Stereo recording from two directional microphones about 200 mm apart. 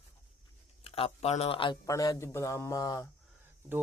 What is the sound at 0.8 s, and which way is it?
Speech, 30° left (ahead or behind).